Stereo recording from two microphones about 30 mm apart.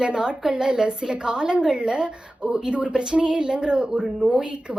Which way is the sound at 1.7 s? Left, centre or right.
Right.